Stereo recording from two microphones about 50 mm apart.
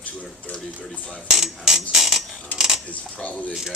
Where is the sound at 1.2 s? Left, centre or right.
Centre.